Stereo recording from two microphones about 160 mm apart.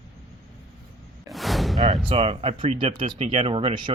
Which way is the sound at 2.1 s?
40° right (ahead or behind).